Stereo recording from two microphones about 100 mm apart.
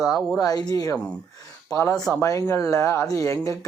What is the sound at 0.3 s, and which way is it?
Speech, 40° left (ahead or behind).